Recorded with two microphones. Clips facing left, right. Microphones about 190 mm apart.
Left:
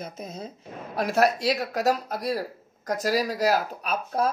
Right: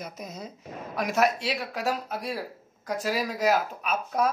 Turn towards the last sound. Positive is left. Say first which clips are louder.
# even
turn(degrees=30)  # may be behind; listen again after turning